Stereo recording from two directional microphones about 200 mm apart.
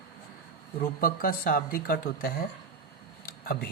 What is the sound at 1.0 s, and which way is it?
Speech, 45° left (ahead or behind).